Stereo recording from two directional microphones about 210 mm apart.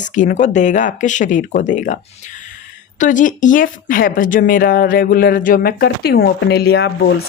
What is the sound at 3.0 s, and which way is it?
Speech, 40° left (ahead or behind).